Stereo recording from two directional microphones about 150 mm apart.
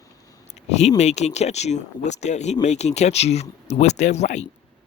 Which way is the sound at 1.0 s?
50° left (ahead or behind).